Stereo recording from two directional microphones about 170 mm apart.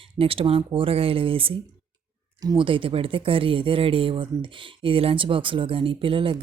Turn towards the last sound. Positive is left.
turn(degrees=-30)  # may be behind; listen again after turning